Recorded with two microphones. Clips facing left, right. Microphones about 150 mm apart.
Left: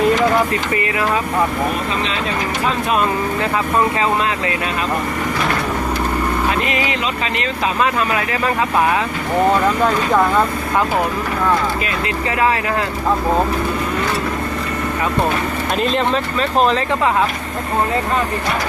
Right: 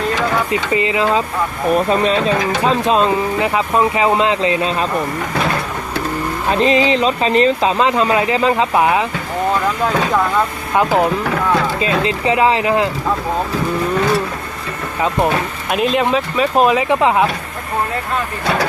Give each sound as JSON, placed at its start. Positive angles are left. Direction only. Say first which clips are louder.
{"t": 0.5, "sound": "speech", "louder": "right 3 dB", "side_deg": -20}
{"t": 2.6, "sound": "speech", "louder": "right 4 dB", "side_deg": -25}
{"t": 6.6, "sound": "speech", "louder": "right 7 dB", "side_deg": -30}
{"t": 10.8, "sound": "speech", "louder": "right 5 dB", "side_deg": -20}
{"t": 15.7, "sound": "speech", "louder": "right 3 dB", "side_deg": -5}